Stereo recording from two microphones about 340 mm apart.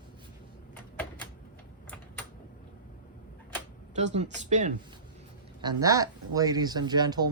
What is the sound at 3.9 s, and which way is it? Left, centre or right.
Speech, centre.